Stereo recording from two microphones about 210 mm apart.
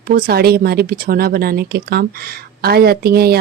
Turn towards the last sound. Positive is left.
turn(degrees=-50)  # may be behind; listen again after turning